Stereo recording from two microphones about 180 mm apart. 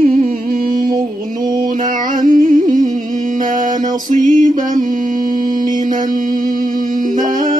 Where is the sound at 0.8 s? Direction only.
50° right (ahead or behind).